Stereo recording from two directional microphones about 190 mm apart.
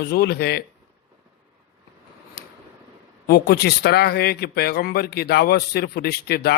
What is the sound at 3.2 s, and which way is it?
A man's voice, 60° left (ahead or behind).